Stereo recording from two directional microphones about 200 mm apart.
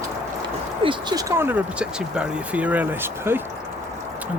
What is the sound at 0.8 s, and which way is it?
Speech, 25° right (ahead or behind).